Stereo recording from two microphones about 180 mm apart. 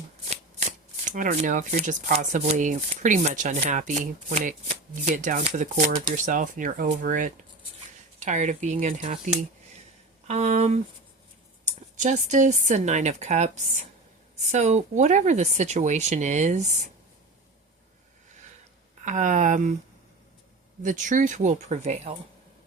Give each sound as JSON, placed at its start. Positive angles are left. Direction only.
{"t": 0.3, "sound": "speech", "side_deg": -40}
{"t": 11.9, "sound": "speech", "side_deg": -45}
{"t": 14.5, "sound": "speech", "side_deg": -40}
{"t": 19.0, "sound": "speech", "side_deg": -45}
{"t": 20.8, "sound": "speech", "side_deg": -45}